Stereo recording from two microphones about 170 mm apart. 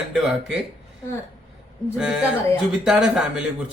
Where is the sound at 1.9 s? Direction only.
5° right (ahead or behind).